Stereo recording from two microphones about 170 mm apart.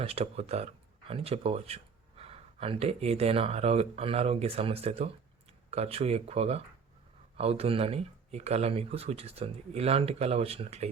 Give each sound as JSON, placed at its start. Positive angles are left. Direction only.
{"t": 0.0, "sound": "speech", "side_deg": -35}